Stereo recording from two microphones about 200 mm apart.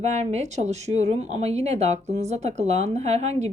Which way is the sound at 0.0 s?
35° right (ahead or behind).